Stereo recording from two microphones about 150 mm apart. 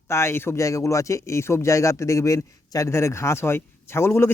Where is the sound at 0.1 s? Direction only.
15° left (ahead or behind).